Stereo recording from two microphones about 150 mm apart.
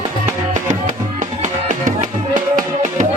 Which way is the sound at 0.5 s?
55° right (ahead or behind).